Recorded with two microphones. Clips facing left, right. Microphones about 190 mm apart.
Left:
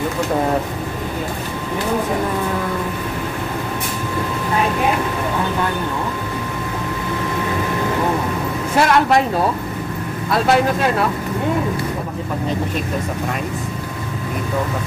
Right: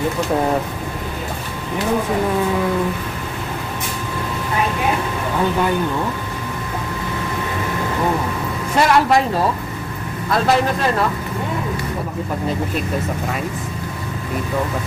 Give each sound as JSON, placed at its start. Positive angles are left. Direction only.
{"t": 8.7, "sound": "a man's voice", "side_deg": 0}
{"t": 10.3, "sound": "a man's voice", "side_deg": 0}